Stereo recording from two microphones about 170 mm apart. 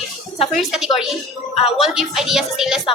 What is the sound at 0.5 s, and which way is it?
Speech, centre (ahead or behind).